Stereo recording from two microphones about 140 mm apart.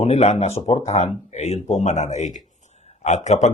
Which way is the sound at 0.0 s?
50° left (ahead or behind).